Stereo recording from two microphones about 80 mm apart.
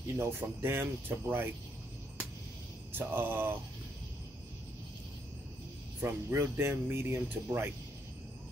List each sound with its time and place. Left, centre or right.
0.1 s speech: right
2.9 s speech: right
5.9 s speech: right